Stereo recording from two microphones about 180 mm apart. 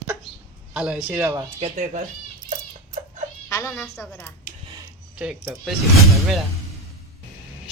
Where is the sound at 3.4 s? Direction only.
15° left (ahead or behind).